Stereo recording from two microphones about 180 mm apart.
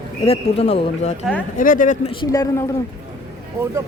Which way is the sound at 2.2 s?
20° left (ahead or behind).